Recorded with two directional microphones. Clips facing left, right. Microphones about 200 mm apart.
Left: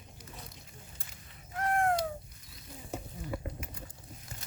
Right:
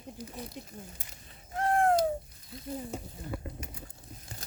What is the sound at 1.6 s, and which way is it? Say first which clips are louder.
Bird: right 3 dB; 30° right (ahead or behind).